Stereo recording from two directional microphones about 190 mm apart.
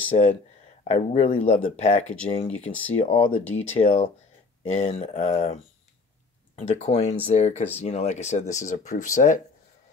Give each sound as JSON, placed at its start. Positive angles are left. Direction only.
{"t": 0.1, "sound": "speech", "side_deg": 35}
{"t": 2.5, "sound": "speech", "side_deg": 10}
{"t": 2.9, "sound": "speech", "side_deg": 35}
{"t": 6.7, "sound": "speech", "side_deg": 35}